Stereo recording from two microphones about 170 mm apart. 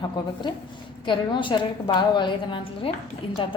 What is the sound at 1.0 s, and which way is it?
A woman's voice, 30° left (ahead or behind).